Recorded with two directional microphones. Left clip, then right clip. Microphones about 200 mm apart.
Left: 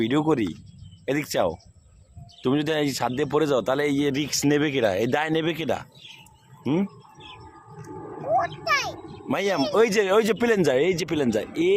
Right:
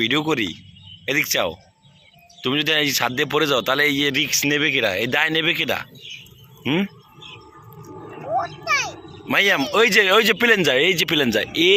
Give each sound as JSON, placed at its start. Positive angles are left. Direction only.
{"t": 0.0, "sound": "speech", "side_deg": 20}
{"t": 6.6, "sound": "speech", "side_deg": 0}